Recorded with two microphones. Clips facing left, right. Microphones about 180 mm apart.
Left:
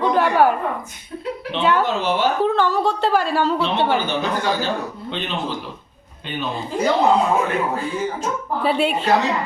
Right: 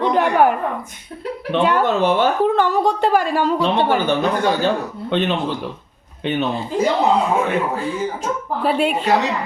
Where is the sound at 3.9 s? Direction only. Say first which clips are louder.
Right 3 dB; 55° right (ahead or behind).